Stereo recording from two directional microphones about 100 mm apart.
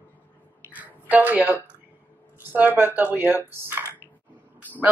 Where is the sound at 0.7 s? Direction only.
15° right (ahead or behind).